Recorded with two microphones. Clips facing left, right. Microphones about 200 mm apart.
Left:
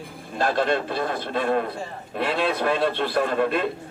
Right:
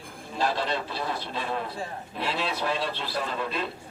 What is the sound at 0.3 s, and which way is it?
A man's voice, 55° left (ahead or behind).